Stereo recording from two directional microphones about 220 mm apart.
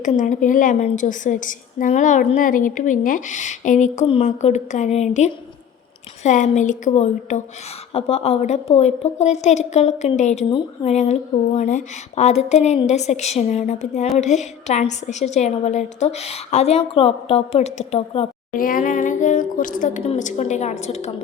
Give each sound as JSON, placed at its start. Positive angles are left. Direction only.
{"t": 0.0, "sound": "a woman's voice", "side_deg": 35}
{"t": 18.5, "sound": "a woman's voice", "side_deg": 40}